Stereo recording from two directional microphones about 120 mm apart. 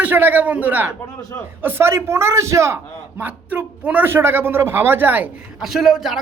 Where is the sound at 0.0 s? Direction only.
15° right (ahead or behind).